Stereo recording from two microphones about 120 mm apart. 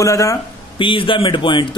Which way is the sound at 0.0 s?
25° left (ahead or behind).